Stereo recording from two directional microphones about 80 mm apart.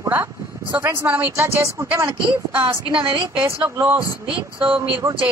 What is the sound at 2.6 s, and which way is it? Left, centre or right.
Speech, right.